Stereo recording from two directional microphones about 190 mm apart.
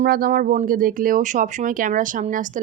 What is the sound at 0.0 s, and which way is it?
Speech, 50° right (ahead or behind).